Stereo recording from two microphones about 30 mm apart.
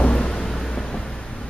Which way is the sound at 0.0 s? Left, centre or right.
Left.